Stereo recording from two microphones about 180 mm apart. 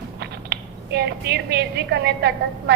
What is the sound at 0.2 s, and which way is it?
A woman's voice, 65° right (ahead or behind).